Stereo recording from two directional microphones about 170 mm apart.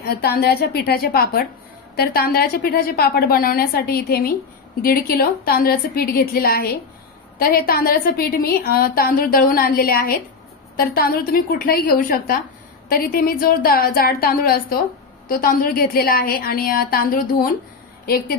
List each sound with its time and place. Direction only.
0.0 s a woman's voice: 65° left (ahead or behind)